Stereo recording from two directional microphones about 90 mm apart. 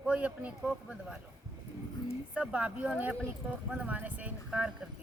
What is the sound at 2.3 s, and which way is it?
Speech, 15° right (ahead or behind).